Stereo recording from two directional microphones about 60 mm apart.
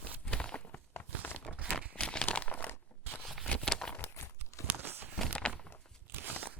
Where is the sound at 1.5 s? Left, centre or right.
Left.